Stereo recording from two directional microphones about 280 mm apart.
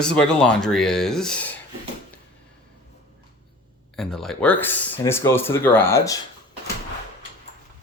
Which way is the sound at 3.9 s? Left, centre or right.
Centre.